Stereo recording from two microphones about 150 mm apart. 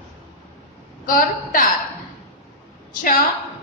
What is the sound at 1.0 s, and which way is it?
Speech, 70° left (ahead or behind).